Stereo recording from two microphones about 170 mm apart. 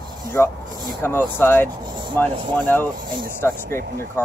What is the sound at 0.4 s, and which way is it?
Speech, 10° left (ahead or behind).